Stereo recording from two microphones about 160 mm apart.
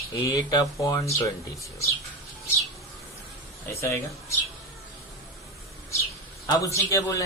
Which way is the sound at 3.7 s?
20° left (ahead or behind).